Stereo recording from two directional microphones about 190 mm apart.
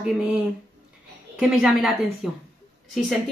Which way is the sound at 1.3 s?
Centre (ahead or behind).